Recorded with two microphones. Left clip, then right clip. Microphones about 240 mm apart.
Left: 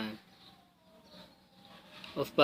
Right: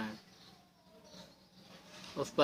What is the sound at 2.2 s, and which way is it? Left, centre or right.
Speech, left.